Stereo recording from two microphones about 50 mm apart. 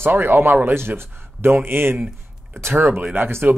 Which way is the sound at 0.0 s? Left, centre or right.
Right.